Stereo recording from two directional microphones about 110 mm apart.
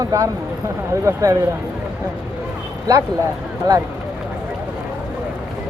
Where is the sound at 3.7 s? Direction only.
35° right (ahead or behind).